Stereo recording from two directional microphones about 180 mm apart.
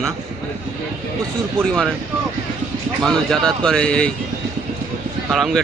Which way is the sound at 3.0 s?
5° left (ahead or behind).